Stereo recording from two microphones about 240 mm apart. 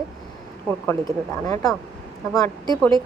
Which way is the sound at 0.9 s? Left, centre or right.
Centre.